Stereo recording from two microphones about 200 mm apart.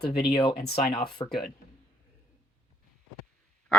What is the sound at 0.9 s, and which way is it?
Speech, 25° left (ahead or behind).